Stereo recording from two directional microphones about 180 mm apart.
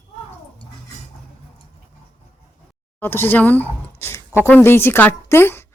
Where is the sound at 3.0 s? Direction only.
10° left (ahead or behind).